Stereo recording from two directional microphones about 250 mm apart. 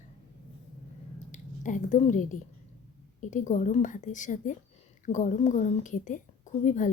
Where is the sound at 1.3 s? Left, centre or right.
Left.